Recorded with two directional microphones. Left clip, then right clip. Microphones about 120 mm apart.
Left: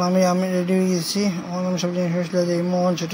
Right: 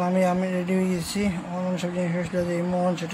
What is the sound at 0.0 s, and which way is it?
Speech, 15° left (ahead or behind).